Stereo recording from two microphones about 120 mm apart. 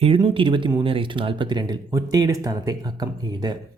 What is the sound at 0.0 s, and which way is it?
Speech, 45° right (ahead or behind).